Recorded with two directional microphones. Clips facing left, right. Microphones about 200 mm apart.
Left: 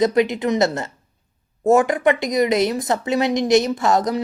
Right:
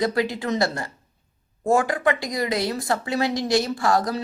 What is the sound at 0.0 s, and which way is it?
Speech, 20° left (ahead or behind).